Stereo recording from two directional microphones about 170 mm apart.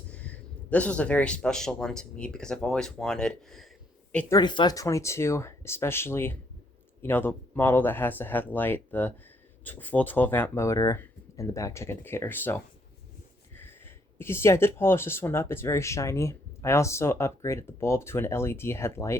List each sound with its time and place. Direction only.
0.1 s a man's voice: 10° left (ahead or behind)
4.4 s speech: 25° left (ahead or behind)